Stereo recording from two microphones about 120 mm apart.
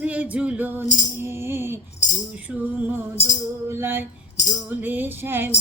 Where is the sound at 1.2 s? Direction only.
20° right (ahead or behind).